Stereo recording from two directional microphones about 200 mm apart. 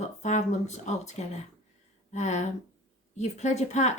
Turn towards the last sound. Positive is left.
turn(degrees=35)  # may be behind; listen again after turning